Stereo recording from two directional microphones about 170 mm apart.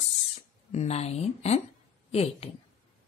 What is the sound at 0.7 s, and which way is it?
A woman's voice, 40° left (ahead or behind).